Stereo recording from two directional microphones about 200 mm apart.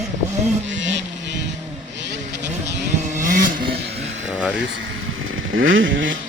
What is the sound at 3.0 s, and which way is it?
Vehicle, 40° right (ahead or behind).